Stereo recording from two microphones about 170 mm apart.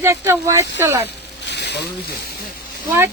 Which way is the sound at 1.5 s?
85° left.